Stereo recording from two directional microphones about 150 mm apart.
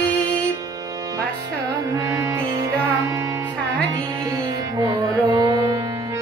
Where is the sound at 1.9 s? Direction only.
25° right (ahead or behind).